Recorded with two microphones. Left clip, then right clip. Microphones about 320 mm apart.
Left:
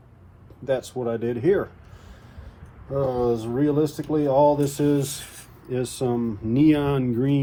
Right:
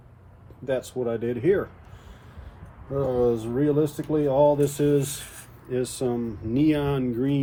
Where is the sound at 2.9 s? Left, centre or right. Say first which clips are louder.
Even; centre.